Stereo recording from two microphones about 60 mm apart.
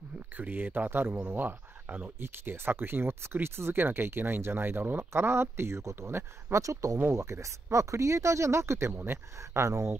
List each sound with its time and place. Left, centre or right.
0.4 s speech: right
6.6 s speech: right